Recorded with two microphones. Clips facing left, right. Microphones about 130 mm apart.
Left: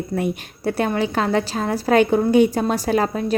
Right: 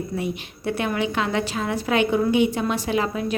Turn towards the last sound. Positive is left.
turn(degrees=40)  # may be behind; listen again after turning